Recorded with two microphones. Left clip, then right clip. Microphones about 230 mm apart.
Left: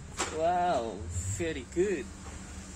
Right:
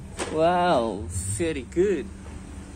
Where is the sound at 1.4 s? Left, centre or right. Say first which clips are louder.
Right 7 dB; centre.